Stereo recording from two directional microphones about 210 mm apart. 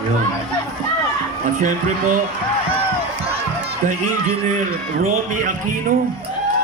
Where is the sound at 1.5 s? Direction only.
40° right (ahead or behind).